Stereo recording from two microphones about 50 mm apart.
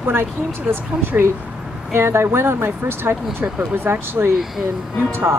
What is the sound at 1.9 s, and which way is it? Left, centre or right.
Speech, right.